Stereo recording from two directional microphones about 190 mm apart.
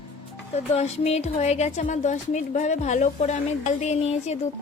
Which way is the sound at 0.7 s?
35° left (ahead or behind).